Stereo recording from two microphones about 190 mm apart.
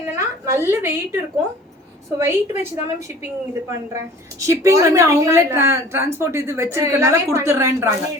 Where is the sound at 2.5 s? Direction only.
35° left (ahead or behind).